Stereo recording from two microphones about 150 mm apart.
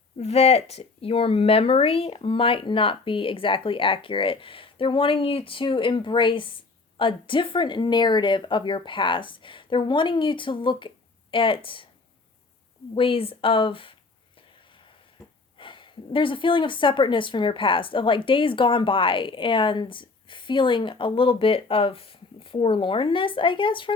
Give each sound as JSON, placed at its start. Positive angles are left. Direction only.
{"t": 0.2, "sound": "speech", "side_deg": 45}
{"t": 12.9, "sound": "speech", "side_deg": 35}
{"t": 15.5, "sound": "speech", "side_deg": 35}